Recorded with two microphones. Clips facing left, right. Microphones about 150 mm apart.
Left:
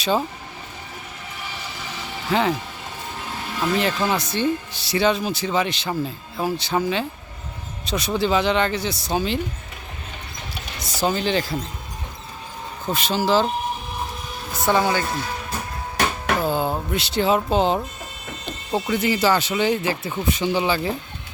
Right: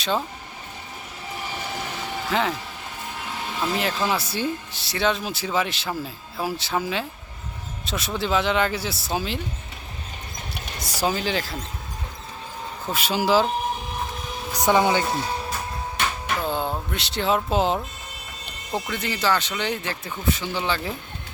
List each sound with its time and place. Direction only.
2.3 s speech: centre (ahead or behind)
3.8 s speech: centre (ahead or behind)
10.8 s speech: 10° right (ahead or behind)
12.8 s speech: 5° right (ahead or behind)
14.5 s speech: 15° right (ahead or behind)
16.4 s music: 5° left (ahead or behind)
16.9 s speech: centre (ahead or behind)